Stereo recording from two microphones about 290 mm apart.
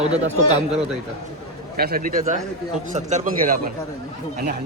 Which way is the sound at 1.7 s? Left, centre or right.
Right.